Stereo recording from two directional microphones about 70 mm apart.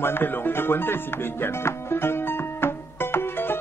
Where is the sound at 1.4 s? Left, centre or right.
Left.